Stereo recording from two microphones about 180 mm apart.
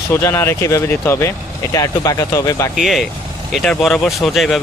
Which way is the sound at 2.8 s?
Centre (ahead or behind).